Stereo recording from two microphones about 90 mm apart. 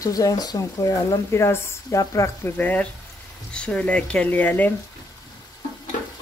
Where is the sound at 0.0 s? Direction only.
40° left (ahead or behind).